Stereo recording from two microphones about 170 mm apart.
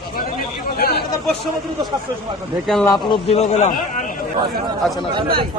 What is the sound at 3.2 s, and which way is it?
Speech, 40° left (ahead or behind).